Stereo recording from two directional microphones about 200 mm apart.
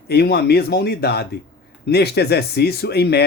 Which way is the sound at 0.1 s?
55° left (ahead or behind).